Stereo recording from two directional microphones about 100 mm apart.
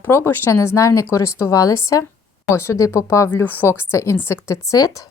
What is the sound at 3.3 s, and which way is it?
Speech, 20° left (ahead or behind).